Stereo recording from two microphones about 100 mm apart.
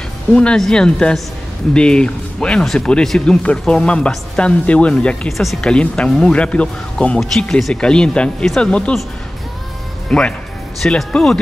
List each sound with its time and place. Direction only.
0.3 s speech: 10° left (ahead or behind)
10.0 s speech: 10° left (ahead or behind)